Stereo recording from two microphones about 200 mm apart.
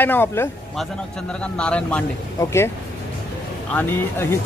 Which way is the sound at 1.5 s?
5° left (ahead or behind).